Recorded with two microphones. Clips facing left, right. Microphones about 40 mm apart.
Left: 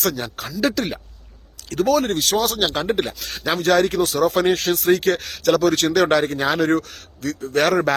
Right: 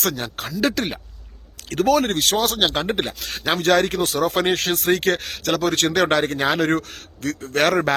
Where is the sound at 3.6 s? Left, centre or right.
Right.